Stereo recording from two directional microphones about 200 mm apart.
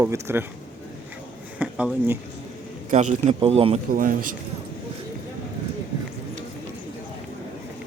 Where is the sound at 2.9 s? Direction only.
35° right (ahead or behind).